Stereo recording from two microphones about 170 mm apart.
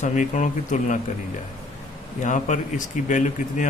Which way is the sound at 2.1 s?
45° left (ahead or behind).